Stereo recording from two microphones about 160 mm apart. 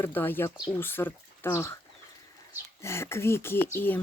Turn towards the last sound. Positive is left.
turn(degrees=15)  # may be behind; listen again after turning